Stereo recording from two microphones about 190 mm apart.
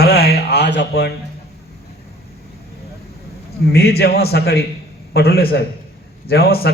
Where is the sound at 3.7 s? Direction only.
55° left (ahead or behind).